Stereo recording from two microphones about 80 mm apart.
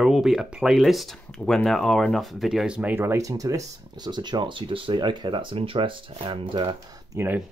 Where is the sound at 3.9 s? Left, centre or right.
Right.